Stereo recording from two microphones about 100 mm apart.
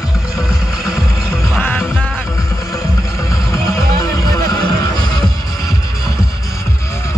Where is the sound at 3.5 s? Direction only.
35° left (ahead or behind).